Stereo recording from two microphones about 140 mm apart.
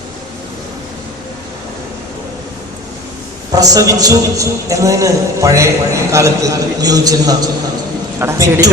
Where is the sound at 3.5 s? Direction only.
25° right (ahead or behind).